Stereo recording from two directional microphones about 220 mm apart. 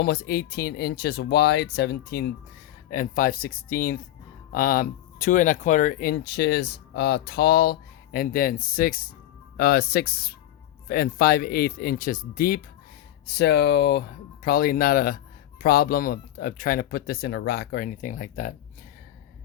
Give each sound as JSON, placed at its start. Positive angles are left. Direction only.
{"t": 0.0, "sound": "speech", "side_deg": 45}